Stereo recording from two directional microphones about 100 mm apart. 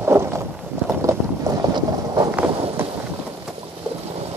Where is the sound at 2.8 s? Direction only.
20° right (ahead or behind).